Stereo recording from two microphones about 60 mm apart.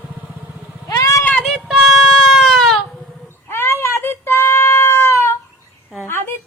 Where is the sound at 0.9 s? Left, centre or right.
Left.